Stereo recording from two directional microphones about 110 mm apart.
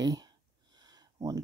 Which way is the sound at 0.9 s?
30° right (ahead or behind).